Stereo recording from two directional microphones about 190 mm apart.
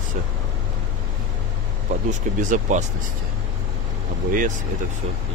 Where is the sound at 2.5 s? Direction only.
40° right (ahead or behind).